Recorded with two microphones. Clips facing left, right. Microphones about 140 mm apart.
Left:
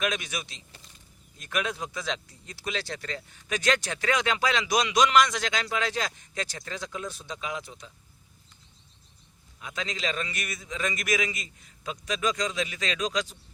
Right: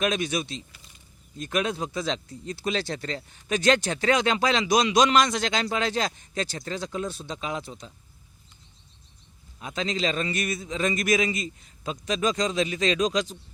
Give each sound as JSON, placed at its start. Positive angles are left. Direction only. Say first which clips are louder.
{"t": 0.0, "sound": "speech", "louder": "right 5 dB", "side_deg": -30}
{"t": 9.6, "sound": "speech", "louder": "right 6 dB", "side_deg": -30}